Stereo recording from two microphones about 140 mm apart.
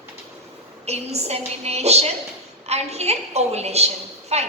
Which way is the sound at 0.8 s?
50° right (ahead or behind).